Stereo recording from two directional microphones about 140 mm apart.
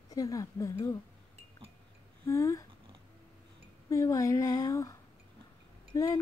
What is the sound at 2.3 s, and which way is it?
Speech, 20° left (ahead or behind).